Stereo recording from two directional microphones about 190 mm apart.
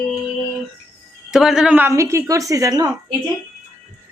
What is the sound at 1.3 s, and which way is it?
Speech, 5° right (ahead or behind).